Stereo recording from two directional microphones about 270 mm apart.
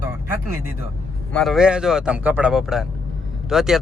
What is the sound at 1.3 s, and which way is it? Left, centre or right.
Speech, centre.